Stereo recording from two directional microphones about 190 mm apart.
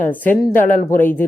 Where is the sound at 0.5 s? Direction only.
45° left (ahead or behind).